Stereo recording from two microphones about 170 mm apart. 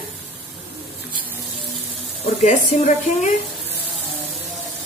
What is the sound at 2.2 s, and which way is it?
Speech, 40° left (ahead or behind).